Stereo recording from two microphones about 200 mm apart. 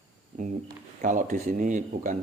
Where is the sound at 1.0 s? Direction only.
40° right (ahead or behind).